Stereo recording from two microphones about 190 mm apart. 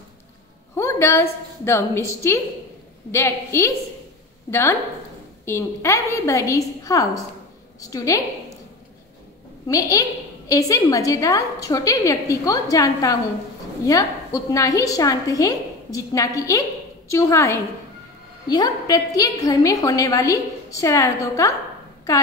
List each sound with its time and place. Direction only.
0.7 s a woman's voice: 15° left (ahead or behind)
9.7 s a woman's voice: 15° left (ahead or behind)